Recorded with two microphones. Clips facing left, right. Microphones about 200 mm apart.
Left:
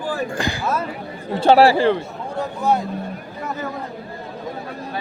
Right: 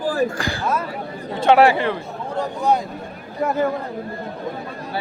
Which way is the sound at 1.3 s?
35° left (ahead or behind).